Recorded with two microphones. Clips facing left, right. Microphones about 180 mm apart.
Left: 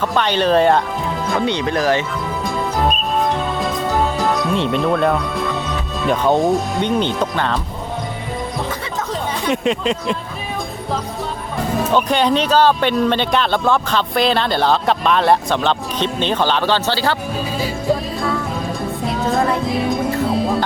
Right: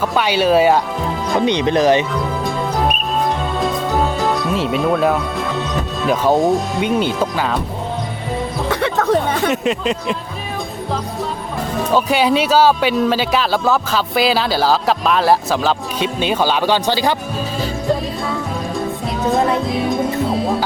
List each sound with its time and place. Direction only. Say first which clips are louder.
0.0 s speech: right 1 dB; 5° right (ahead or behind)
1.5 s speech: right 5 dB; 20° right (ahead or behind)
4.2 s speech: even; 5° right (ahead or behind)
8.7 s music: right 9 dB; 65° right (ahead or behind)
9.5 s speech: even; centre (ahead or behind)
11.9 s speech: right 2 dB; 5° right (ahead or behind)
17.6 s music: even; centre (ahead or behind)
19.6 s speech: even; centre (ahead or behind)
20.2 s music: even; centre (ahead or behind)